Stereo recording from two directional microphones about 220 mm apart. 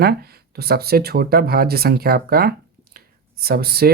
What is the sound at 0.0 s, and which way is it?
Speech, 45° right (ahead or behind).